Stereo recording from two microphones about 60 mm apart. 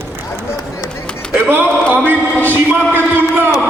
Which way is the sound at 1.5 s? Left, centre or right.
Right.